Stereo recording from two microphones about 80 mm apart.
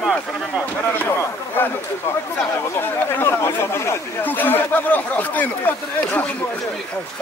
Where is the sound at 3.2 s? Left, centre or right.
Left.